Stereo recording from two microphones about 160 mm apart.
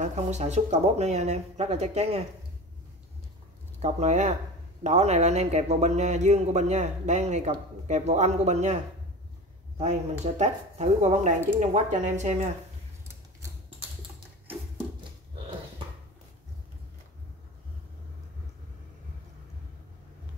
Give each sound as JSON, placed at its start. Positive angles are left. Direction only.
{"t": 0.0, "sound": "speech", "side_deg": -45}
{"t": 3.8, "sound": "speech", "side_deg": -45}
{"t": 9.8, "sound": "speech", "side_deg": -45}